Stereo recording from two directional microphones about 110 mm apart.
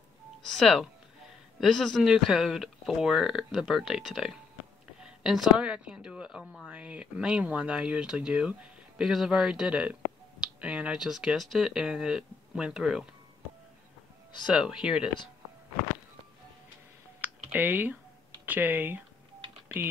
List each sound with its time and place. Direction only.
0.5 s a woman's voice: centre (ahead or behind)
14.5 s a woman's voice: 5° right (ahead or behind)
17.2 s a sound: 15° right (ahead or behind)
18.4 s speech: 15° right (ahead or behind)